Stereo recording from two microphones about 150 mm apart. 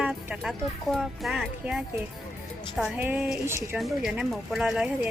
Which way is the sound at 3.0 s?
10° right (ahead or behind).